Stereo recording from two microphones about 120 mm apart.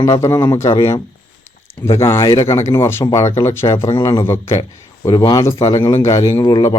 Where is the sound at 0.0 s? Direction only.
25° left (ahead or behind).